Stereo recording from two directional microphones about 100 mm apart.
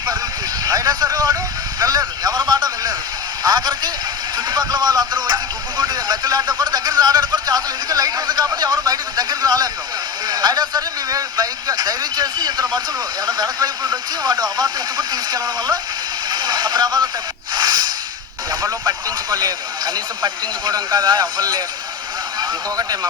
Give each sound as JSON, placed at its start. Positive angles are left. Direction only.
{"t": 0.6, "sound": "vehicle", "side_deg": -40}
{"t": 1.8, "sound": "a sound", "side_deg": -40}
{"t": 4.4, "sound": "music", "side_deg": -45}
{"t": 5.7, "sound": "a sound", "side_deg": -45}
{"t": 13.2, "sound": "speech", "side_deg": -40}
{"t": 16.3, "sound": "vehicle", "side_deg": -45}
{"t": 17.5, "sound": "snort", "side_deg": -45}
{"t": 18.6, "sound": "speech", "side_deg": -45}
{"t": 22.4, "sound": "a sound", "side_deg": -40}